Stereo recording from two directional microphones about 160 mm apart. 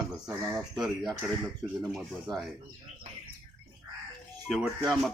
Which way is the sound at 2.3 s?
25° right (ahead or behind).